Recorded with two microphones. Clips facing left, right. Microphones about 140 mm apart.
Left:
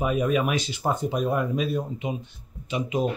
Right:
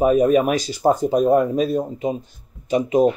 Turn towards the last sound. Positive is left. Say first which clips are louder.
# right 9 dB
turn(degrees=-40)  # may be behind; listen again after turning